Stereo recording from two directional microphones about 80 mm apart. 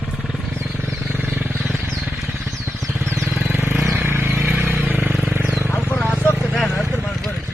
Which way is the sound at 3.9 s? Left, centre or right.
Right.